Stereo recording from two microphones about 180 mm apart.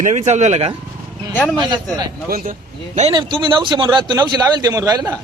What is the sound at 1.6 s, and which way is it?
Speech, 25° right (ahead or behind).